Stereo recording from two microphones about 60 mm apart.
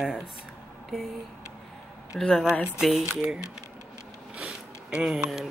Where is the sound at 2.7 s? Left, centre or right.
Centre.